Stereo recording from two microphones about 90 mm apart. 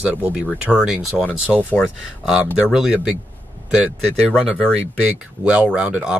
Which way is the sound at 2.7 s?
10° right (ahead or behind).